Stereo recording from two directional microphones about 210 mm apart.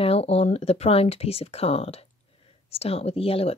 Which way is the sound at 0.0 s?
30° left (ahead or behind).